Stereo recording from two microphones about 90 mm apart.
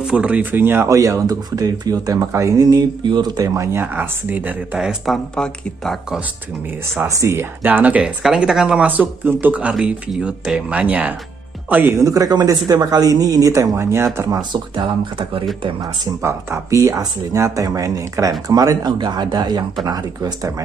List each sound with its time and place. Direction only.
0.0 s speech: 10° right (ahead or behind)
0.8 s speech: 35° right (ahead or behind); by 4.6 s 20° right (ahead or behind)
4.7 s speech: 5° right (ahead or behind)
7.1 s speech: 35° right (ahead or behind); by 11.1 s 15° right (ahead or behind)
11.9 s speech: 40° right (ahead or behind)
14.3 s speech: 55° right (ahead or behind)
15.8 s speech: 30° right (ahead or behind)